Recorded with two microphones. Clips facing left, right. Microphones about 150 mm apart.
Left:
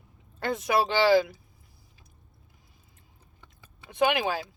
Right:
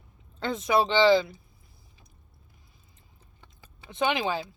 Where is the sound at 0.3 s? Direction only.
10° left (ahead or behind).